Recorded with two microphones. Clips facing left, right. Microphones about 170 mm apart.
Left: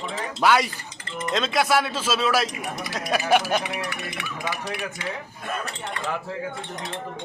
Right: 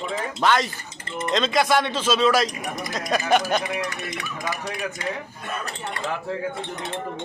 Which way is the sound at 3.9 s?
45° right (ahead or behind).